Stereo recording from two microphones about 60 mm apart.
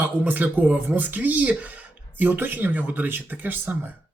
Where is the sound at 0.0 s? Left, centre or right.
Right.